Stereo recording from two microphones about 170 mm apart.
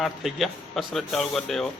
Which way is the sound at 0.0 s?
Centre (ahead or behind).